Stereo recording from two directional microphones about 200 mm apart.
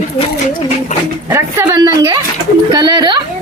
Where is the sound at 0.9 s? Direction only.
40° left (ahead or behind).